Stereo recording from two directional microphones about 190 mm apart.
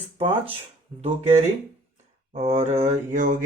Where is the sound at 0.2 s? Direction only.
30° right (ahead or behind).